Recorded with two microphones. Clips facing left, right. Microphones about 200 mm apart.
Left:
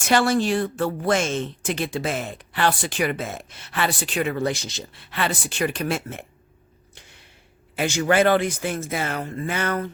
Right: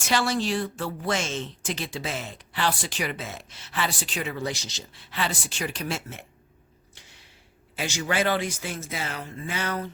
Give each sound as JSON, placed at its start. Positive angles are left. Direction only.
{"t": 0.0, "sound": "speech", "side_deg": 55}
{"t": 6.9, "sound": "a sound", "side_deg": 55}
{"t": 7.8, "sound": "speech", "side_deg": 55}